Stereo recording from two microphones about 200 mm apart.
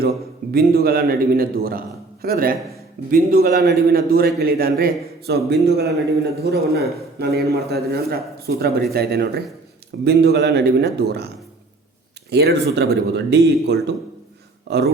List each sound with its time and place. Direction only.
0.5 s a man's voice: 50° right (ahead or behind)
12.3 s speech: 50° right (ahead or behind)